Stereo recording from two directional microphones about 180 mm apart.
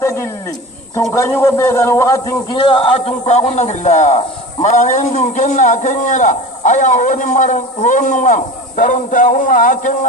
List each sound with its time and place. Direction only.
0.0 s wild animals: 15° left (ahead or behind)
1.1 s a man's voice: 15° left (ahead or behind); by 9.9 s 45° left (ahead or behind)